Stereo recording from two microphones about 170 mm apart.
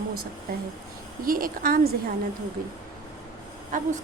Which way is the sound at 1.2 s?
55° right (ahead or behind).